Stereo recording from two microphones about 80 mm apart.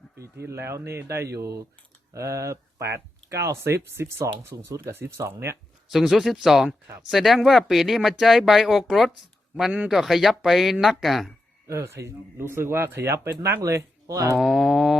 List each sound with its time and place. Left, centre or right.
0.2 s speech: right
5.9 s speech: centre
11.7 s speech: right
14.3 s speech: centre